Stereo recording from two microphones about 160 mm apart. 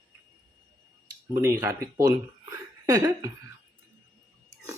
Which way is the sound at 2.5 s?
20° right (ahead or behind).